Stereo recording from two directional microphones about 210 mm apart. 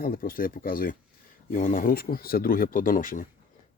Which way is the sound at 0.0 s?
45° left (ahead or behind).